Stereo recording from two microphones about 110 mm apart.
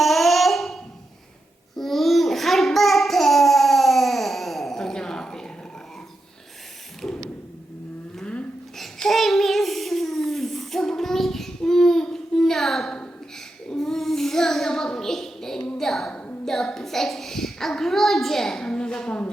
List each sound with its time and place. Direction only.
0.0 s a sound: centre (ahead or behind)
1.7 s babbling: centre (ahead or behind)
7.0 s mechanisms: 10° left (ahead or behind)
8.2 s child singing: 10° left (ahead or behind)